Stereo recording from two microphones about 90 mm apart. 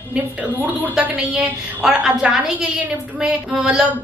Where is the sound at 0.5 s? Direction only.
20° right (ahead or behind).